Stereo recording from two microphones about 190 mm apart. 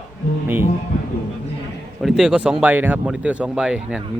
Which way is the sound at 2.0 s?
Centre (ahead or behind).